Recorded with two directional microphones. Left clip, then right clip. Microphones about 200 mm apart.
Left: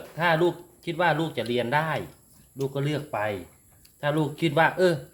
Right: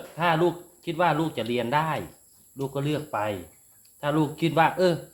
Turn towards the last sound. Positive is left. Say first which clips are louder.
# even
turn(degrees=0)  # may be behind; listen again after turning